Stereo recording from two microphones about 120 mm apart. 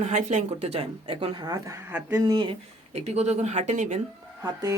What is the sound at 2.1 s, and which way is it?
Speech, 30° right (ahead or behind).